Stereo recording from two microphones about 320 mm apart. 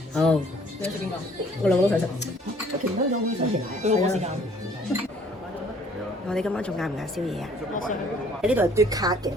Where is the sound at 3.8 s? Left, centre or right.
Right.